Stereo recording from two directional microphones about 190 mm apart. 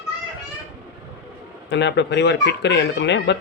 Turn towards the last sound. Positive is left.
turn(degrees=65)  # may be behind; listen again after turning